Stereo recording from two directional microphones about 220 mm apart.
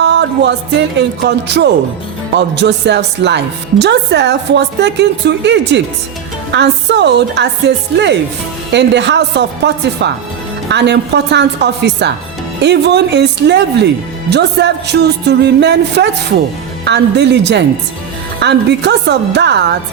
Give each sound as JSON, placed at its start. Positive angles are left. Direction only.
{"t": 0.0, "sound": "music", "side_deg": -50}
{"t": 0.9, "sound": "a woman's voice", "side_deg": -50}